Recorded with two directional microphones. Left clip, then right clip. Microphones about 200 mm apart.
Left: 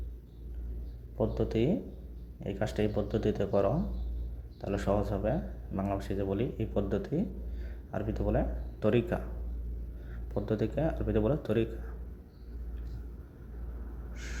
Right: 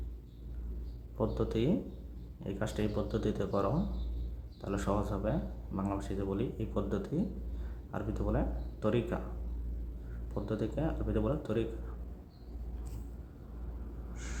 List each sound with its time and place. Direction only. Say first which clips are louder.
1.2 s speech: left 3 dB; 10° left (ahead or behind)
10.3 s speech: left 4 dB; 15° left (ahead or behind)